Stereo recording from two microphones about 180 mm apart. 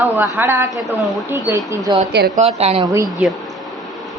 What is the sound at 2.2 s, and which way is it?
Speech, 65° right (ahead or behind).